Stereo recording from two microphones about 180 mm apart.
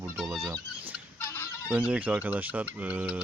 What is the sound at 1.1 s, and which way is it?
Fowl, 15° left (ahead or behind).